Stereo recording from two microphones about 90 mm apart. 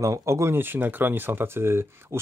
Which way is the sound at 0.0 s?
35° right (ahead or behind).